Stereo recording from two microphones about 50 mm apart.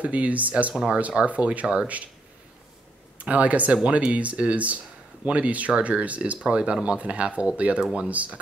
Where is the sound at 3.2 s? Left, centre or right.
Right.